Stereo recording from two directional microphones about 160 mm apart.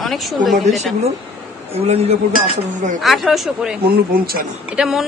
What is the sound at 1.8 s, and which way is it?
Speech, 40° right (ahead or behind).